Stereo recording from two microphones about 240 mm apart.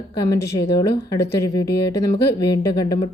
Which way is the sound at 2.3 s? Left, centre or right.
Centre.